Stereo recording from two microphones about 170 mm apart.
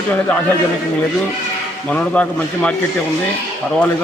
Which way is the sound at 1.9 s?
10° left (ahead or behind).